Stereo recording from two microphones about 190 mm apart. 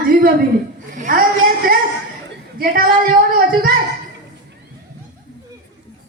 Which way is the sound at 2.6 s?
50° right (ahead or behind).